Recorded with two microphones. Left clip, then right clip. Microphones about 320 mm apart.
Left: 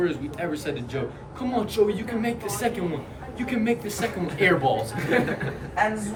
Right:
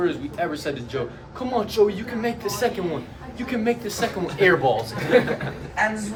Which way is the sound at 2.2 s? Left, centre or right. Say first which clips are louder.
Right 4 dB; centre.